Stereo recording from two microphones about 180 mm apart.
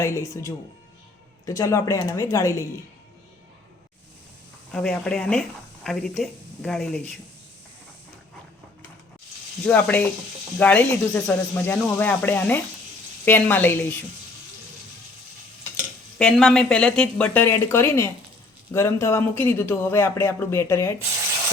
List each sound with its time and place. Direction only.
0.0 s speech: 15° left (ahead or behind)
4.7 s speech: 5° left (ahead or behind)
9.6 s speech: 10° left (ahead or behind)
16.1 s speech: 5° left (ahead or behind)